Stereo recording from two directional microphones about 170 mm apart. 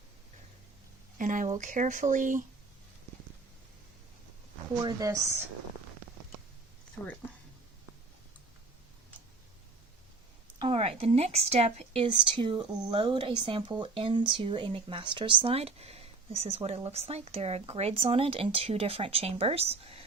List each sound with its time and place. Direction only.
1.2 s speech: 50° right (ahead or behind)
4.8 s a woman's voice: 20° right (ahead or behind)
10.6 s speech: 35° right (ahead or behind)